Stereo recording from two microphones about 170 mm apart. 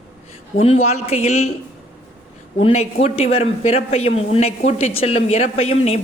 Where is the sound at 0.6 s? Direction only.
35° left (ahead or behind).